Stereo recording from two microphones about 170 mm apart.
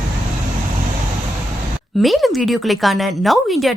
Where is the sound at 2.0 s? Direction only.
Centre (ahead or behind).